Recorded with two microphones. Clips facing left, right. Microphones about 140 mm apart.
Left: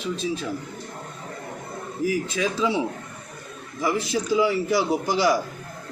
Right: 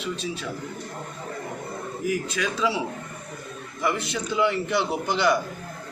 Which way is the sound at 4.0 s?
35° left (ahead or behind).